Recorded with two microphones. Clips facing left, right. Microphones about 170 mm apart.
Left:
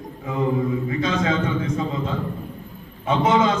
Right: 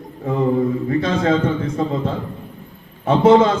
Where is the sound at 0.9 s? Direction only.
55° right (ahead or behind).